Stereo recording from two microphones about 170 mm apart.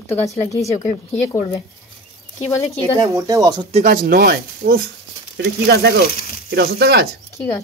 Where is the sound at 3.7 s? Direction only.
50° right (ahead or behind); by 7.0 s 70° right (ahead or behind).